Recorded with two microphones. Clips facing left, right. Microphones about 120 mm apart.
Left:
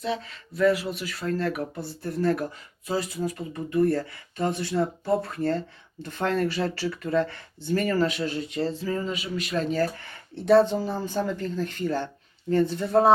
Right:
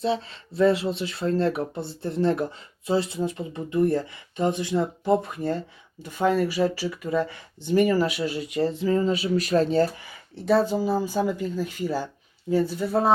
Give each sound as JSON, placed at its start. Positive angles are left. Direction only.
{"t": 0.0, "sound": "speech", "side_deg": -30}
{"t": 10.0, "sound": "speech", "side_deg": -5}